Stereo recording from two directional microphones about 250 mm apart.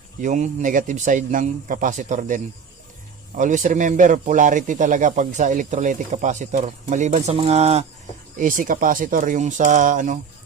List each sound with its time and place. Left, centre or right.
0.2 s speech: right